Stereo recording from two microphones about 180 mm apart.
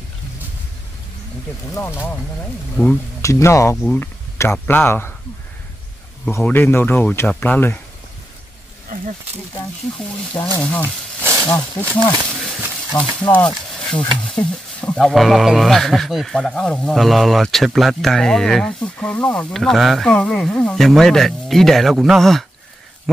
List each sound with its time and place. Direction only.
1.7 s speech: 15° left (ahead or behind)
6.2 s speech: 10° left (ahead or behind)
8.8 s a sound: 45° right (ahead or behind)
10.6 s speech: 10° left (ahead or behind)
11.9 s a sound: 5° left (ahead or behind)
13.3 s speech: 5° left (ahead or behind)